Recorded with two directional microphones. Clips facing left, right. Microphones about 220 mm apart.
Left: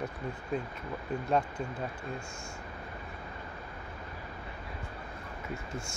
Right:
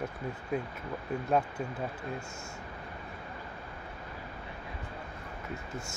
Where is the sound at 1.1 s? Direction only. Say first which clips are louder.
Even; 5° right (ahead or behind).